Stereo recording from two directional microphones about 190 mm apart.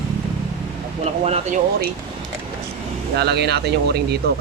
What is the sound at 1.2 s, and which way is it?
Speech, 35° right (ahead or behind).